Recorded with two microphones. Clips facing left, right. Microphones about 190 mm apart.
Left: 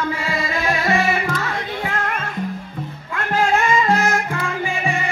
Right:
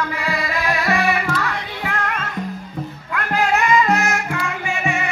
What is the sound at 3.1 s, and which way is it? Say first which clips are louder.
Music: left 1 dB; 30° left (ahead or behind).